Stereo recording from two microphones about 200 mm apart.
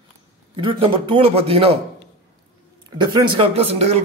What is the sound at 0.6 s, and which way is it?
Speech, 25° right (ahead or behind).